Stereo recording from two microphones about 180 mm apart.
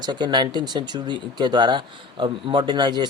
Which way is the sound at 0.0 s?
25° right (ahead or behind).